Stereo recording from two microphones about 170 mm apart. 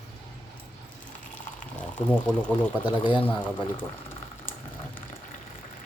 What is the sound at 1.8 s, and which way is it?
Speech, 5° left (ahead or behind).